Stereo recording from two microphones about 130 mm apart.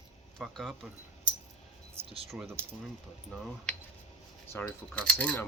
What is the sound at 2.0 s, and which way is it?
Speech, 50° right (ahead or behind).